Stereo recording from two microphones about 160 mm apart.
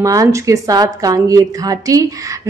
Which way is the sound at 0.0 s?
20° right (ahead or behind).